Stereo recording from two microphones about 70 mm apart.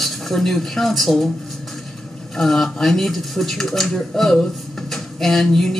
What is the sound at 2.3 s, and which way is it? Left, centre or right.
Speech, centre.